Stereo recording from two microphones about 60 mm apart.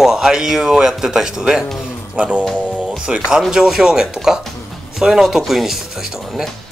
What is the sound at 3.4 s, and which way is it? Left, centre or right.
A man's voice, centre.